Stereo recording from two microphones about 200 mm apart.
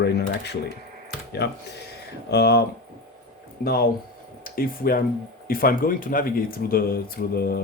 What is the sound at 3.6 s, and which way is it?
Speech, 50° left (ahead or behind).